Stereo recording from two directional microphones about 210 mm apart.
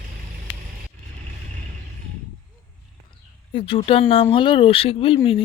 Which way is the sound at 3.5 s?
25° left (ahead or behind).